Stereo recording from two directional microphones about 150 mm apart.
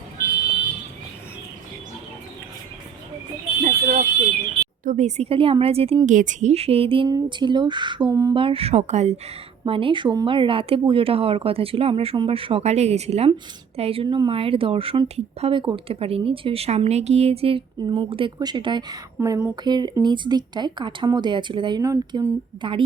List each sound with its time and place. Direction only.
3.6 s a sound: 70° right (ahead or behind)
4.8 s a woman's voice: 55° right (ahead or behind)
6.1 s a woman's voice: 55° right (ahead or behind); by 8.4 s 20° right (ahead or behind)
8.4 s a woman's voice: 40° right (ahead or behind)
9.6 s a woman's voice: 35° right (ahead or behind); by 22.3 s 20° right (ahead or behind)
22.6 s a woman's voice: 35° right (ahead or behind)